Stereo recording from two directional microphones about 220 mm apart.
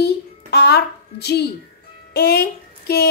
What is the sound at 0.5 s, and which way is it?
A child's voice, 45° left (ahead or behind).